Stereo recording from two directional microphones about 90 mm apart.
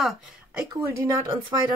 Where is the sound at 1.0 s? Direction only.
30° right (ahead or behind).